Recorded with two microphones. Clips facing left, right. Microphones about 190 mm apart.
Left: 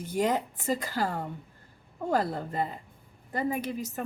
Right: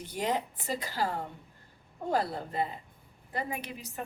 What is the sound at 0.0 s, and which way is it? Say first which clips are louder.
A woman's voice: left 4 dB; 45° left (ahead or behind).